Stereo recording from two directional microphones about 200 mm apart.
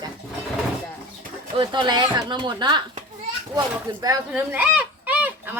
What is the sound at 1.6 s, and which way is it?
A child's voice, 25° right (ahead or behind).